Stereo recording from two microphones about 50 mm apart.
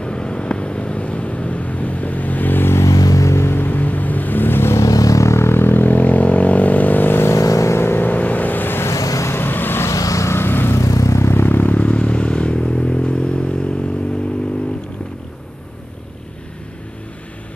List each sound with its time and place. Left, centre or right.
0.0 s vehicle: centre; by 2.7 s left
2.7 s a sound: left
3.4 s vehicle: left
4.7 s vehicle: left
7.2 s vehicle: left
7.8 s vehicle: left
8.1 s vehicle: left
8.8 s vehicle: left
9.3 s vehicle: left
9.8 s vehicle: left
10.4 s vehicle: left
10.8 s vehicle: left
11.3 s vehicle: left
11.7 s vehicle: left